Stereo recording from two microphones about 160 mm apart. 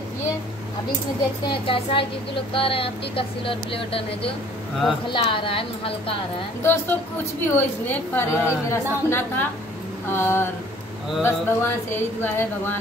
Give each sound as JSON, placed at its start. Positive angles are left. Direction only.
{"t": 1.5, "sound": "speech", "side_deg": 35}
{"t": 6.6, "sound": "a woman's voice", "side_deg": 15}